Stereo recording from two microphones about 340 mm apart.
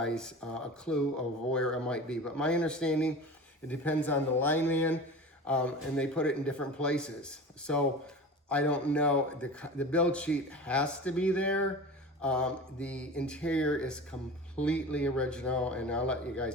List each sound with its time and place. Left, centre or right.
0.0 s a man's voice: centre